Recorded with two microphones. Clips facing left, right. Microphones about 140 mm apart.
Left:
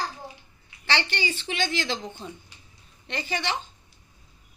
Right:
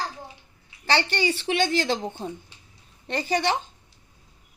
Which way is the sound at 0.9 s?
40° right (ahead or behind).